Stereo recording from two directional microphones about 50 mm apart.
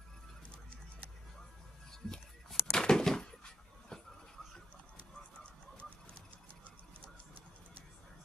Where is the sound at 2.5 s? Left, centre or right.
Centre.